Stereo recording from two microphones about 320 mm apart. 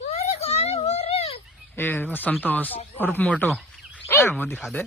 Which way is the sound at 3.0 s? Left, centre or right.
Centre.